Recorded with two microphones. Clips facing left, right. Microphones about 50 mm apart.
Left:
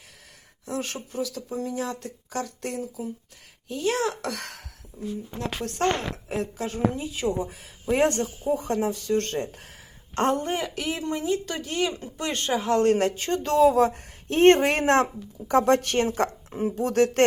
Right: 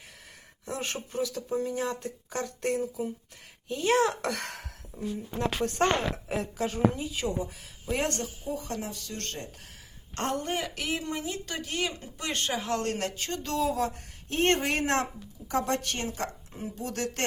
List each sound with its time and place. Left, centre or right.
0.6 s speech: right
5.5 s speech: centre
7.3 s speech: left
10.4 s speech: centre
12.8 s speech: left